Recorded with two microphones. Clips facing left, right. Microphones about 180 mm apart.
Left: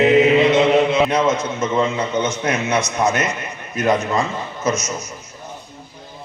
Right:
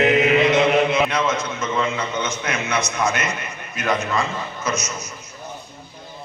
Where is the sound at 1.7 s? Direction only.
25° left (ahead or behind).